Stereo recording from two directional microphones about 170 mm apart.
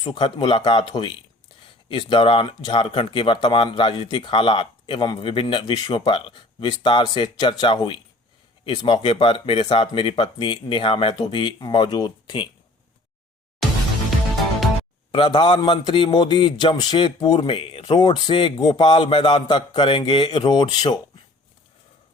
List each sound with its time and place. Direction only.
0.0 s speech: 25° left (ahead or behind)
15.1 s speech: 30° left (ahead or behind)